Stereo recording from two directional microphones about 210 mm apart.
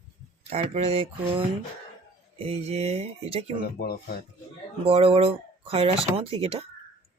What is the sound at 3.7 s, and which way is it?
Speech, 50° left (ahead or behind).